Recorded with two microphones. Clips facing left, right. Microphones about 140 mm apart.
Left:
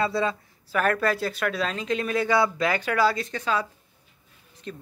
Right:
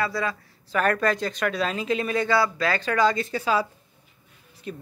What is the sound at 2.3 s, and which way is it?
Speech, 20° left (ahead or behind).